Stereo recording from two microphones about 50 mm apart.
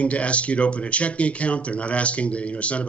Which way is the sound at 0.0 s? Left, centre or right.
Left.